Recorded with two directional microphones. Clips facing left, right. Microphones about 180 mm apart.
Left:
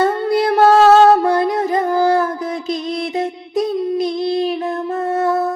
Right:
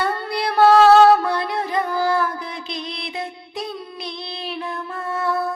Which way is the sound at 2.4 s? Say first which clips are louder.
Left 9 dB; 45° left (ahead or behind).